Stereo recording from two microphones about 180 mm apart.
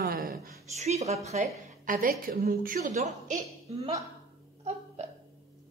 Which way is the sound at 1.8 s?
50° right (ahead or behind).